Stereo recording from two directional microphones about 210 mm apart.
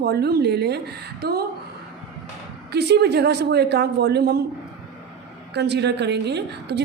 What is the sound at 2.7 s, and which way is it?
A woman's voice, 50° right (ahead or behind).